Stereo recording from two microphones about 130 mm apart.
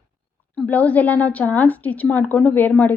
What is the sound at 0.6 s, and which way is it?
Speech, 10° left (ahead or behind).